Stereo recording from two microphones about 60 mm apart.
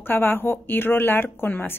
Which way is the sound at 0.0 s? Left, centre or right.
Left.